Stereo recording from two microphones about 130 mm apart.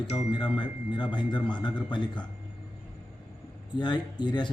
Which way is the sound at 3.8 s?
35° left (ahead or behind).